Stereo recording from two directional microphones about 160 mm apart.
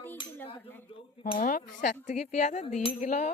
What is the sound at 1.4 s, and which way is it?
Cutlery, 60° left (ahead or behind).